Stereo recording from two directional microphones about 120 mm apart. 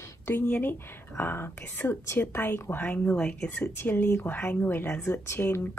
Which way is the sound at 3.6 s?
20° left (ahead or behind).